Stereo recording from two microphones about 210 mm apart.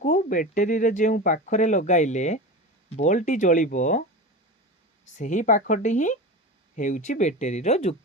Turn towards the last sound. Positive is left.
turn(degrees=30)  # may be behind; listen again after turning